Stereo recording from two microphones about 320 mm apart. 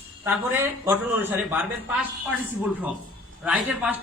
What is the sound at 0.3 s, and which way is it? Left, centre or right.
Speech, centre.